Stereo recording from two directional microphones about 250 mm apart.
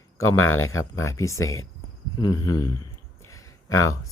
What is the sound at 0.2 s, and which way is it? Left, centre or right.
Speech, left.